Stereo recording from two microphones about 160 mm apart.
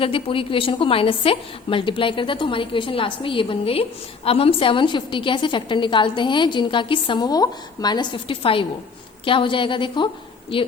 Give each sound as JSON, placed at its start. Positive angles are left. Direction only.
{"t": 0.0, "sound": "a woman's voice", "side_deg": 35}